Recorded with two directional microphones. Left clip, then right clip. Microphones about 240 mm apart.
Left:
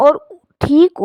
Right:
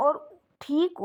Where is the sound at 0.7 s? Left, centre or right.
Left.